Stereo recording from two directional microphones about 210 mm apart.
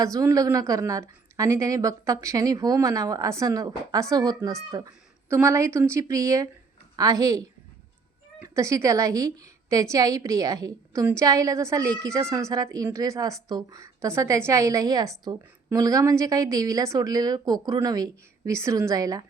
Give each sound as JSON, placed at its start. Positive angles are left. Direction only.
{"t": 0.0, "sound": "a woman's voice", "side_deg": -15}